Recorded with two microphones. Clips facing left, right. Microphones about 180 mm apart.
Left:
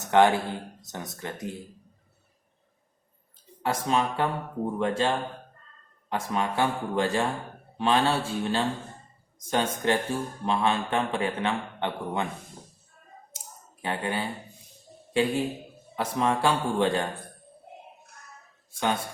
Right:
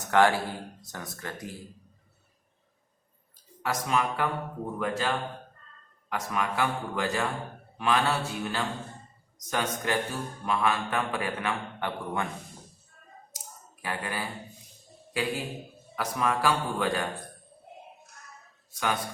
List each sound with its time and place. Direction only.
0.0 s speech: 20° left (ahead or behind)
3.6 s speech: 30° left (ahead or behind)
13.8 s a man's voice: 25° left (ahead or behind)
18.7 s speech: 25° left (ahead or behind)